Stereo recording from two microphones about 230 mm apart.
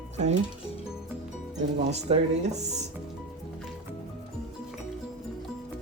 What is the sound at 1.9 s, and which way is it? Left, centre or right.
Speech, right.